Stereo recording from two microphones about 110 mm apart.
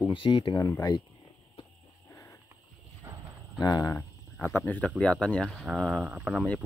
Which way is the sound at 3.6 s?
35° left (ahead or behind).